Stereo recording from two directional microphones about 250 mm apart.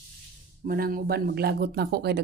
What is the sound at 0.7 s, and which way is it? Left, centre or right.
Speech, right.